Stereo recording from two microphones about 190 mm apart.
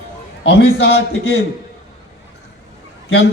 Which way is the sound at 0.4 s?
60° left (ahead or behind).